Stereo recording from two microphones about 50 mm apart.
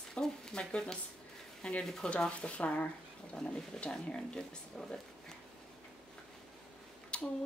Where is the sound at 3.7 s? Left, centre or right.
Centre.